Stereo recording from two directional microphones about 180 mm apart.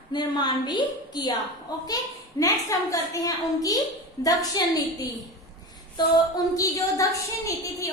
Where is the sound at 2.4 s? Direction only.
20° left (ahead or behind).